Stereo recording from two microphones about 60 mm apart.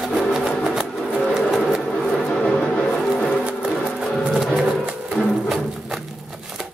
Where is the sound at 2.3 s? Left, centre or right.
Centre.